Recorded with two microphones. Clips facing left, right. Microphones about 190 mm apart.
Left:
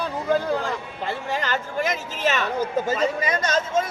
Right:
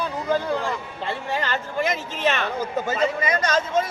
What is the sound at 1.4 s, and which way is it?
Speech, 45° left (ahead or behind).